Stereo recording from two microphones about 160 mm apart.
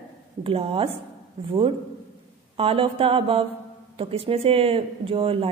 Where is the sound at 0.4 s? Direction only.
35° right (ahead or behind).